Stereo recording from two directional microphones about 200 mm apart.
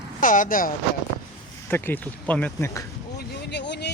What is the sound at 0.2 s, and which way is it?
Speech, 40° left (ahead or behind).